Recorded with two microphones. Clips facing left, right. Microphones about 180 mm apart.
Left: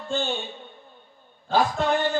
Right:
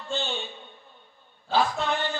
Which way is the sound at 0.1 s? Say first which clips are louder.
Left 4 dB; 50° left (ahead or behind).